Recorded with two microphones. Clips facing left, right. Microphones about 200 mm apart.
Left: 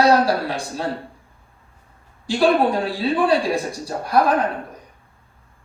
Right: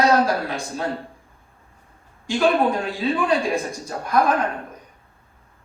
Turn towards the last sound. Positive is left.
turn(degrees=35)  # may be behind; listen again after turning